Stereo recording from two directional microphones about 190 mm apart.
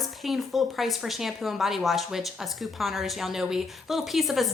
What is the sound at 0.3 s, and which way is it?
A woman's voice, centre (ahead or behind).